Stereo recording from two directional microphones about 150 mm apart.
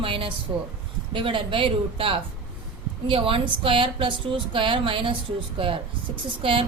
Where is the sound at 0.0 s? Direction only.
35° right (ahead or behind).